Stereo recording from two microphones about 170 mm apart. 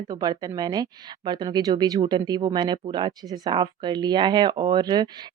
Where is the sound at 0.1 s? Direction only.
25° right (ahead or behind).